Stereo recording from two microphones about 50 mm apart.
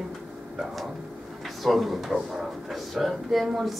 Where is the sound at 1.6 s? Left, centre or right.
Centre.